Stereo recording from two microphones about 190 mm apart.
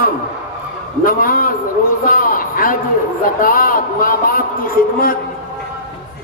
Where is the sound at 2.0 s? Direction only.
45° left (ahead or behind).